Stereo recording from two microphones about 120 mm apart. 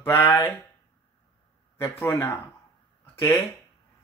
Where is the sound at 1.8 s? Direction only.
20° left (ahead or behind).